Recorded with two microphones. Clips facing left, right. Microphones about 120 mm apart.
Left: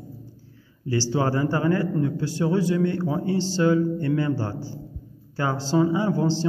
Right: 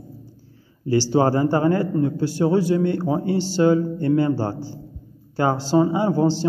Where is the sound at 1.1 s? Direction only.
35° right (ahead or behind).